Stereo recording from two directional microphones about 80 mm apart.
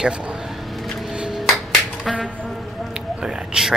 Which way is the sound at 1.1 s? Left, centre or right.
Centre.